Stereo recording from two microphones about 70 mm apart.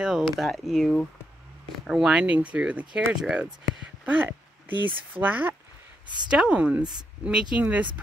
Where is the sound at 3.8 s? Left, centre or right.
Right.